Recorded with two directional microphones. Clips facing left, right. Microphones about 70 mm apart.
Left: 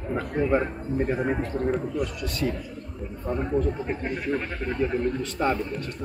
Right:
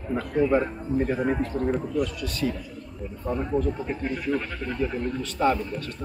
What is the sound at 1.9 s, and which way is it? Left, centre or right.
Speech, left.